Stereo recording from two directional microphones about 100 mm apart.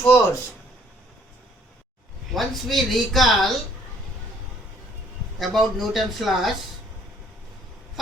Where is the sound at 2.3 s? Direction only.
Centre (ahead or behind).